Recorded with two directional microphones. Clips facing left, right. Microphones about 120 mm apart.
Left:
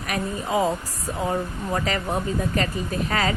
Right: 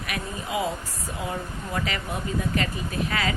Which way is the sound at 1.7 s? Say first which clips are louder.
Left 5 dB; 40° left (ahead or behind).